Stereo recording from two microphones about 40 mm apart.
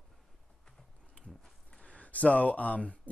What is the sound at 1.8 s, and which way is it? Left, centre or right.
Speech, left.